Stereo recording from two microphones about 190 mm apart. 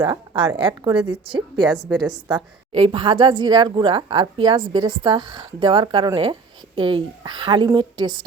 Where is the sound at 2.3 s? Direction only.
30° right (ahead or behind).